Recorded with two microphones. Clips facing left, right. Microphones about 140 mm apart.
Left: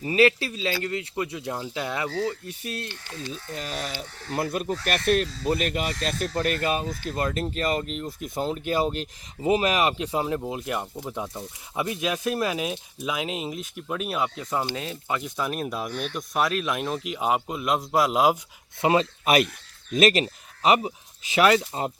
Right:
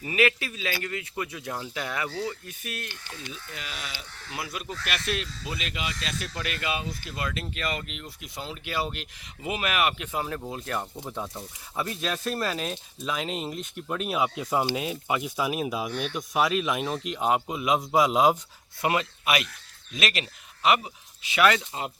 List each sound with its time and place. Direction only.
0.0 s speech: 35° left (ahead or behind)
10.2 s speech: 15° left (ahead or behind)
18.8 s speech: 25° left (ahead or behind)
19.2 s speech: 45° left (ahead or behind)